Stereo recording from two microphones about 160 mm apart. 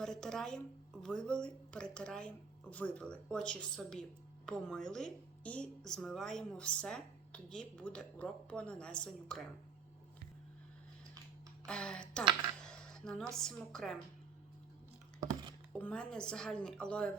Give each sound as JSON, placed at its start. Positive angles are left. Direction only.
{"t": 0.0, "sound": "a woman's voice", "side_deg": 5}
{"t": 11.6, "sound": "speech", "side_deg": 5}
{"t": 15.2, "sound": "music", "side_deg": -25}
{"t": 15.8, "sound": "a woman's voice", "side_deg": 5}